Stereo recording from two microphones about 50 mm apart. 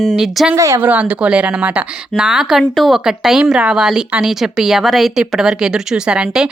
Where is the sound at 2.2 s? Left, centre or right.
Centre.